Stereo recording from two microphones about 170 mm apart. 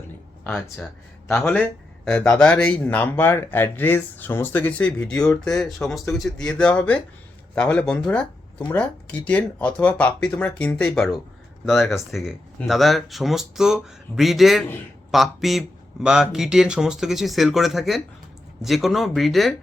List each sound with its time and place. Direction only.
0.4 s speech: 10° left (ahead or behind)